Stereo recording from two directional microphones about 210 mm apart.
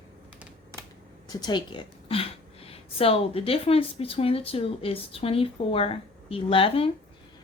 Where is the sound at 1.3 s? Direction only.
20° left (ahead or behind).